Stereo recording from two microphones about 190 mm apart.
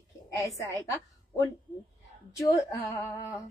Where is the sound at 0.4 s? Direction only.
15° left (ahead or behind).